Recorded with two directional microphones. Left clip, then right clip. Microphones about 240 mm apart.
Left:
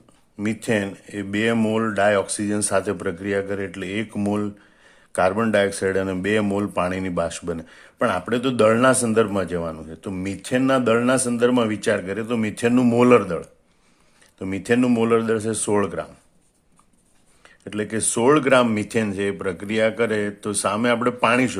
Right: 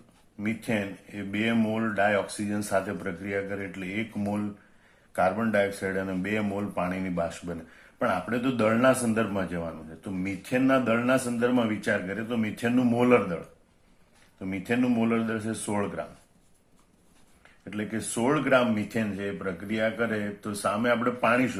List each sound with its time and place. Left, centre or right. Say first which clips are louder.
0.3 s speech: left 7 dB; left
17.7 s speech: left 8 dB; left